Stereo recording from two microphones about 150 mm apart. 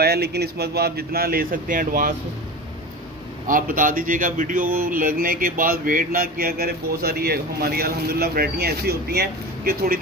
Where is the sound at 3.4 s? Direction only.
65° right (ahead or behind); by 10.0 s 85° right.